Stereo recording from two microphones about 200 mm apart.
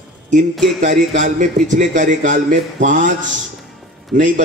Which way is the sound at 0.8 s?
40° right (ahead or behind).